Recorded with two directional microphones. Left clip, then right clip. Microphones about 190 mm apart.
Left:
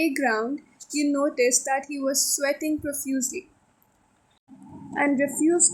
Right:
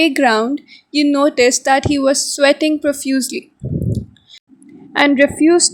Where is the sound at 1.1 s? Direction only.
45° right (ahead or behind).